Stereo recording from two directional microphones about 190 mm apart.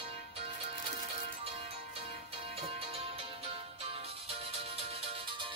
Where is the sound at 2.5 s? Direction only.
30° right (ahead or behind).